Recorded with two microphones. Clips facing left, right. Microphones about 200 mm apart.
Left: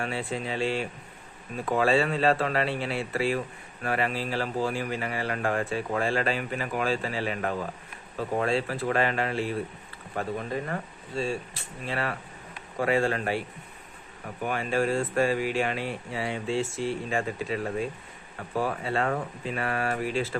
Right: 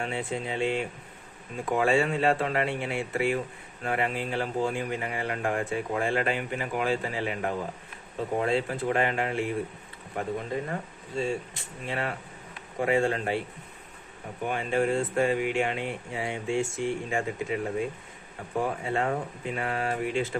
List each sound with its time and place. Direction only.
0.0 s speech: 20° right (ahead or behind)
14.4 s speech: 20° right (ahead or behind)